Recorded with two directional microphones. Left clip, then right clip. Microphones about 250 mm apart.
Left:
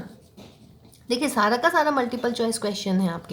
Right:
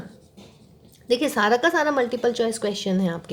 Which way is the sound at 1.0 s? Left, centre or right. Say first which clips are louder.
Right 2 dB; right.